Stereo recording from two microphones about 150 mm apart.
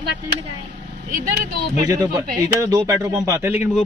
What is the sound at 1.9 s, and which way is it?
Speech, 25° right (ahead or behind).